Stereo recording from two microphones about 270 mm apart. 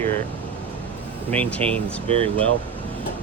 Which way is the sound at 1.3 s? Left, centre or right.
Centre.